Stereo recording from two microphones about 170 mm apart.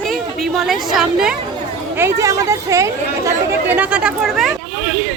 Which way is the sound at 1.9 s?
15° right (ahead or behind).